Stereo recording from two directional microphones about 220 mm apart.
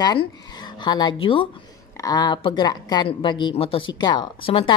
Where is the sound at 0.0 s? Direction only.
20° left (ahead or behind).